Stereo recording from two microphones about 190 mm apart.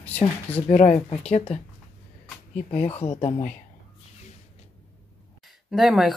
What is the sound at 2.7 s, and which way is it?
Speech, 30° left (ahead or behind).